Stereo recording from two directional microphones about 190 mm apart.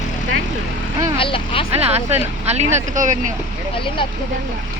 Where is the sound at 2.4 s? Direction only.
35° right (ahead or behind).